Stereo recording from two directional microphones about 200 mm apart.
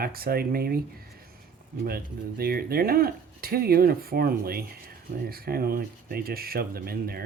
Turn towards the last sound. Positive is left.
turn(degrees=-50)  # may be behind; listen again after turning